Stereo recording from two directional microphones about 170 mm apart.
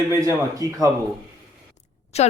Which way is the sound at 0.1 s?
20° right (ahead or behind).